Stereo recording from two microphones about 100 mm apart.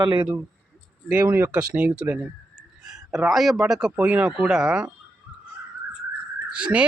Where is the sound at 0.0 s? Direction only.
50° right (ahead or behind).